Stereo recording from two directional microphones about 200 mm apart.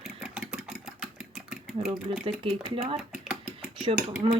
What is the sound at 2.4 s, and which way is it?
Speech, 30° right (ahead or behind).